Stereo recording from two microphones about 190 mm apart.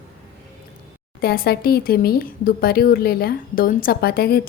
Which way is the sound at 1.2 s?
55° left (ahead or behind).